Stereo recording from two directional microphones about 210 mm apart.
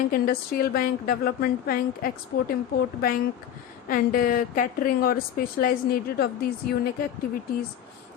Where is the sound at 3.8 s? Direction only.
40° left (ahead or behind).